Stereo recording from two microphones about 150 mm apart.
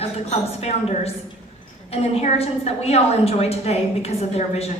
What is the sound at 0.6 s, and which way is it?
A woman's voice, 45° left (ahead or behind).